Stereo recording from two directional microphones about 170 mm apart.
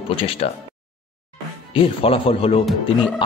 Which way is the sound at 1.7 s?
35° left (ahead or behind).